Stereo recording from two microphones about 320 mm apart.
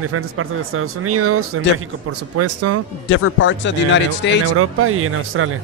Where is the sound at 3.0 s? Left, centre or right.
Left.